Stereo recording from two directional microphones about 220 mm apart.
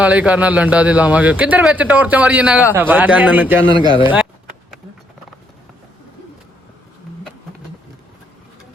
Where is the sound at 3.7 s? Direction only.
20° right (ahead or behind).